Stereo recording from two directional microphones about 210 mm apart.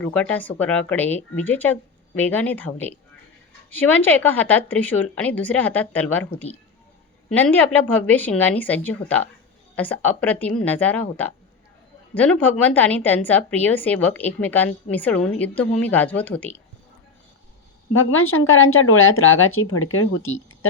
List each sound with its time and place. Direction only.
0.0 s a woman's voice: 5° left (ahead or behind)
17.9 s speech: 75° left (ahead or behind)